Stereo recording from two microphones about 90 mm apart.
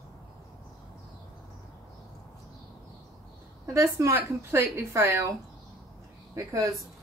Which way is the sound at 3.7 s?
35° right (ahead or behind).